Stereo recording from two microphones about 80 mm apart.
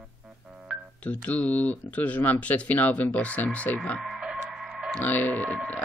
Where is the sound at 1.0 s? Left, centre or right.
Centre.